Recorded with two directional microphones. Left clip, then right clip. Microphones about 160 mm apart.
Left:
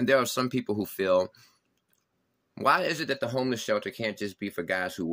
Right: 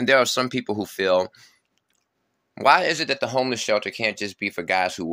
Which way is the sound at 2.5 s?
30° left (ahead or behind).